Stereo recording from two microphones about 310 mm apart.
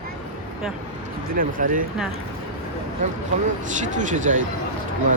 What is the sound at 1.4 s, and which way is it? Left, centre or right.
Speech, right.